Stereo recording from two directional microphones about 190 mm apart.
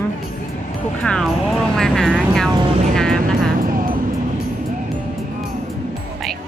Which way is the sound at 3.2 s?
45° right (ahead or behind).